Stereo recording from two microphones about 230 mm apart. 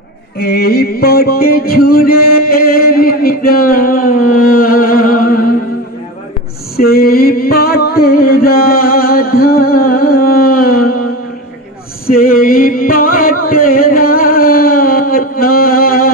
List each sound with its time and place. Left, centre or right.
0.4 s music: left
6.8 s music: left
12.1 s music: left